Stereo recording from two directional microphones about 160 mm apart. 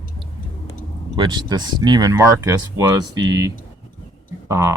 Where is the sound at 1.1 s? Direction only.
30° right (ahead or behind).